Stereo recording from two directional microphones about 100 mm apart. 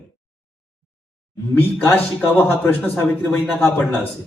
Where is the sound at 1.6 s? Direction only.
20° left (ahead or behind).